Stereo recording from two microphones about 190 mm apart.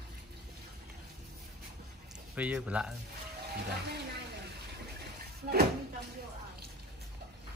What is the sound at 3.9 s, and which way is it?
Speech, 60° right (ahead or behind).